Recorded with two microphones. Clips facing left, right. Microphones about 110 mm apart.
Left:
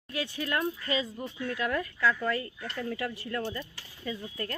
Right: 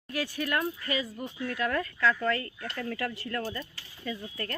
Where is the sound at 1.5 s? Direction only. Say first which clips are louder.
Right 1 dB; 20° left (ahead or behind).